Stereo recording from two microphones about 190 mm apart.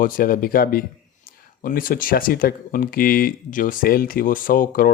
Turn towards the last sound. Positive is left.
turn(degrees=50)  # may be behind; listen again after turning